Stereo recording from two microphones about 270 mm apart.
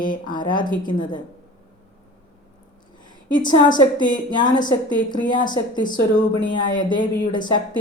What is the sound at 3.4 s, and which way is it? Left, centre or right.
A woman's voice, centre.